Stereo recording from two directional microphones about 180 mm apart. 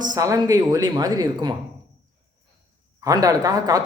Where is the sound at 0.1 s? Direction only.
20° right (ahead or behind).